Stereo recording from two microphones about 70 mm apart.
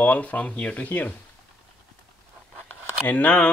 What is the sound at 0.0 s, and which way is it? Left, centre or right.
Speech, left.